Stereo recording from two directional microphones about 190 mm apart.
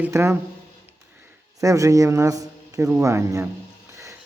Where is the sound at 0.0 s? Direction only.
15° right (ahead or behind).